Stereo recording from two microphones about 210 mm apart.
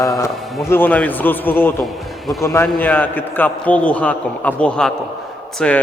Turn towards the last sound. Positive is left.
turn(degrees=5)  # may be behind; listen again after turning